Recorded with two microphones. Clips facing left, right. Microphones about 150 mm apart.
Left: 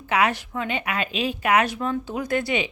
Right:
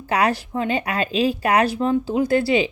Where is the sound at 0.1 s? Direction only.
35° right (ahead or behind).